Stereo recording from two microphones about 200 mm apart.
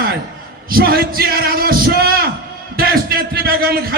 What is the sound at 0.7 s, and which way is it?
A man's voice, 50° right (ahead or behind).